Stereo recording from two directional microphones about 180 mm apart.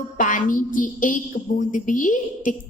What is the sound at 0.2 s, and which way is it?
Speech, 50° left (ahead or behind).